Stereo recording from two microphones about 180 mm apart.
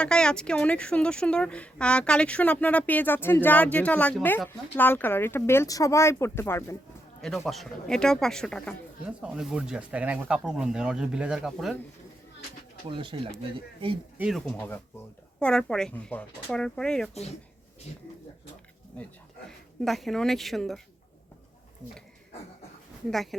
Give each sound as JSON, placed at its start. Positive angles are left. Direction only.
{"t": 0.0, "sound": "speech", "side_deg": 5}
{"t": 7.2, "sound": "speech", "side_deg": 0}
{"t": 13.1, "sound": "speech", "side_deg": -25}
{"t": 14.2, "sound": "speech", "side_deg": 0}
{"t": 17.9, "sound": "speech", "side_deg": 40}
{"t": 19.5, "sound": "a woman's voice", "side_deg": 0}